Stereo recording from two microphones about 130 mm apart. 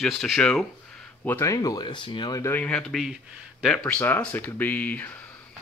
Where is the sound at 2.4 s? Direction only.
15° left (ahead or behind).